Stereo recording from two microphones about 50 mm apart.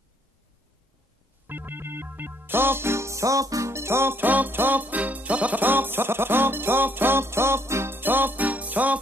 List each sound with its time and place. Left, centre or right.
1.5 s music: right
4.3 s music: right
5.6 s music: right
7.9 s music: right